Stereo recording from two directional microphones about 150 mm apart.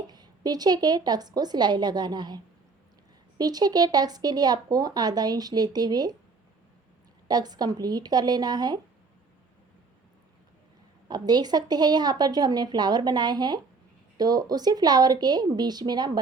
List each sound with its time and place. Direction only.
0.1 s speech: 25° right (ahead or behind)
7.3 s speech: 25° right (ahead or behind)
11.1 s speech: 25° right (ahead or behind)